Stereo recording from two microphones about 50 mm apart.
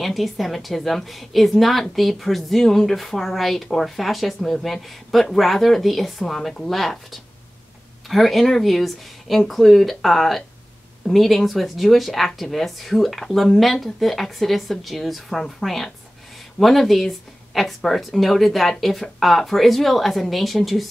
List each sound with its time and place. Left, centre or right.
0.0 s speech: centre